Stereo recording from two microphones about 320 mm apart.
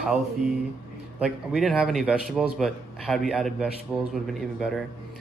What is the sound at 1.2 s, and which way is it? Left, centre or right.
A man's voice, centre.